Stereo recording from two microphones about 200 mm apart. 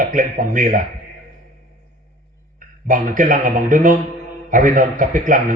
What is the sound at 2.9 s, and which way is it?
A man's voice, 40° right (ahead or behind).